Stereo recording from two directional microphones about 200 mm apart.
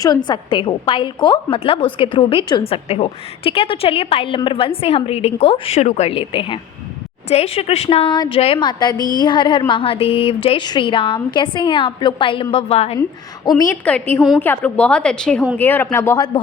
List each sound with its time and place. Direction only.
0.0 s a woman's voice: 20° left (ahead or behind)
13.0 s a woman's voice: 20° left (ahead or behind)
13.8 s speech: 5° left (ahead or behind)